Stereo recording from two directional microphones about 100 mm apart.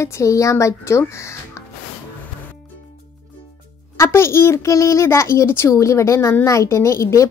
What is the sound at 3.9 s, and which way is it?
Speech, 25° left (ahead or behind).